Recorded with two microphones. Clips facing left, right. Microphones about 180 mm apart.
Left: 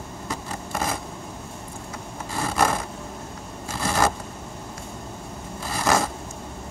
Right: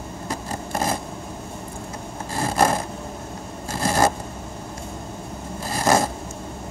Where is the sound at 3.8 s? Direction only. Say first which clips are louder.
Right 3 dB; 40° right (ahead or behind).